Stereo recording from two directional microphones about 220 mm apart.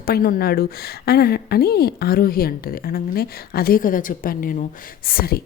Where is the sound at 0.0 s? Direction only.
40° left (ahead or behind).